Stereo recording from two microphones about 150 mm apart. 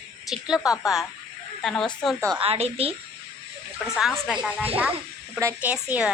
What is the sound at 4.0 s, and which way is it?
A woman's voice, centre (ahead or behind).